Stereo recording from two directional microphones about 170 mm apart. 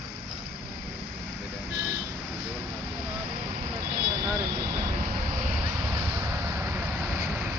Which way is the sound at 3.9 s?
15° right (ahead or behind).